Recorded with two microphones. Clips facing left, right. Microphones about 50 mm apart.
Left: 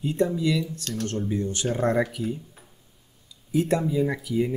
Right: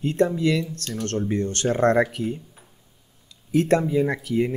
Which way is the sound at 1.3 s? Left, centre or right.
Right.